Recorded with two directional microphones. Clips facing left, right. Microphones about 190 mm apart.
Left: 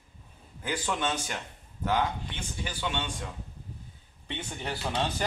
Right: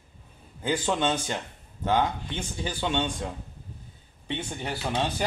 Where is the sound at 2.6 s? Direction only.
30° right (ahead or behind).